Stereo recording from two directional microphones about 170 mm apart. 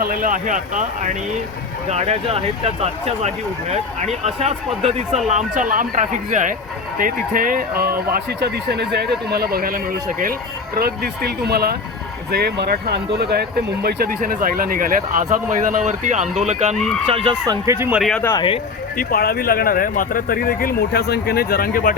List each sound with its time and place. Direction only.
0.0 s speech: 55° right (ahead or behind)
16.7 s speech: centre (ahead or behind)
17.1 s speech: 35° right (ahead or behind)
17.4 s speech: 20° right (ahead or behind)
18.0 s speech: 5° left (ahead or behind)
18.9 s speech: 60° left (ahead or behind)